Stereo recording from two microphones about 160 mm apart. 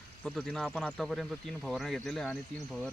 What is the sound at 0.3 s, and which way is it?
Speech, 5° left (ahead or behind).